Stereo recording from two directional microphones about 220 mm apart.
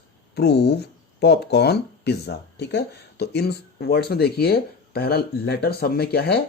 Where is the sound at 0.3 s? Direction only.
50° left (ahead or behind).